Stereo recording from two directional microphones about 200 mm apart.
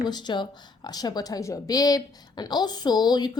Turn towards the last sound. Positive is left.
turn(degrees=20)  # may be behind; listen again after turning